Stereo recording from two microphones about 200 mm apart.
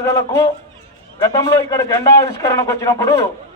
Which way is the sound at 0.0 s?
15° left (ahead or behind).